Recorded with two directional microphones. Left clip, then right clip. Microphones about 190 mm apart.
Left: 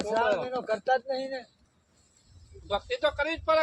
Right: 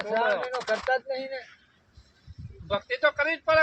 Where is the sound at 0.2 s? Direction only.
Centre (ahead or behind).